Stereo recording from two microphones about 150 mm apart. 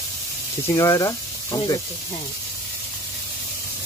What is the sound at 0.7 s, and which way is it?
Speech, 25° left (ahead or behind).